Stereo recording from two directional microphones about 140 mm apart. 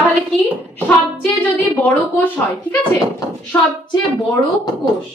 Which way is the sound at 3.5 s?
15° left (ahead or behind).